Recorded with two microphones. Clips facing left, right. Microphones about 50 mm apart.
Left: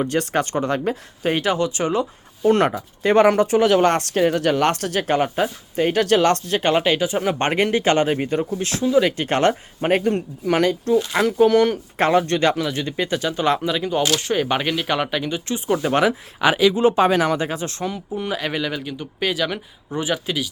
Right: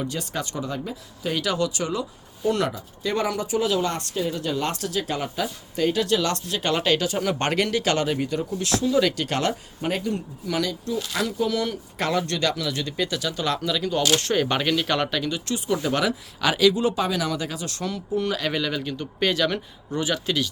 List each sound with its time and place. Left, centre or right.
0.0 s speech: left
1.3 s speech: left
14.2 s speech: centre